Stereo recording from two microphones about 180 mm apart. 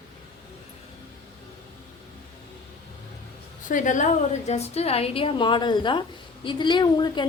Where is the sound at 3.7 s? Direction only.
45° left (ahead or behind).